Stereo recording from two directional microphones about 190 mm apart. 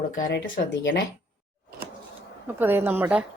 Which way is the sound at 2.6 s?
10° right (ahead or behind).